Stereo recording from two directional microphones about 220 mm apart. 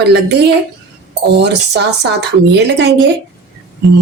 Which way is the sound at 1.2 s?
50° right (ahead or behind).